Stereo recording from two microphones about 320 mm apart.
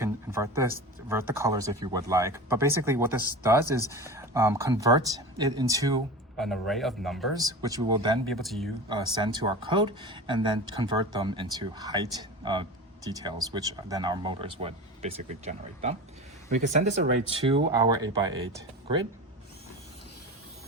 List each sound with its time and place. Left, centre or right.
0.0 s speech: centre
6.3 s speech: centre
7.3 s speech: centre
8.3 s speech: centre
9.1 s speech: centre